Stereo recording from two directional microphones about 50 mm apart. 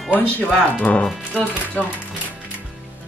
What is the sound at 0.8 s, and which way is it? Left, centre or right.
Speech, left.